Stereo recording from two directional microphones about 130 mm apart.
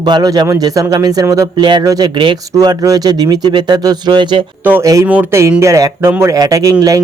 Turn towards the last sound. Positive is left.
turn(degrees=-30)  # may be behind; listen again after turning